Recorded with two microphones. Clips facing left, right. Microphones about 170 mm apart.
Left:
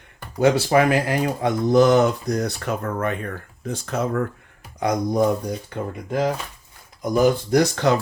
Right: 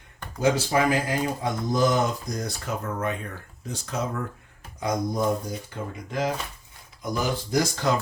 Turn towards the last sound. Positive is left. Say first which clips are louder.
# left 6 dB
turn(degrees=65)  # may be behind; listen again after turning